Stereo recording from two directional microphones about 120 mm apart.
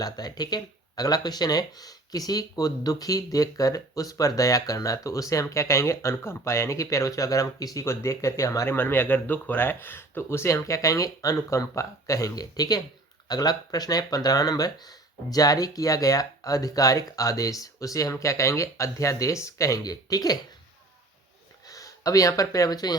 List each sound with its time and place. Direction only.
0.0 s speech: 35° left (ahead or behind)
21.7 s speech: 30° left (ahead or behind)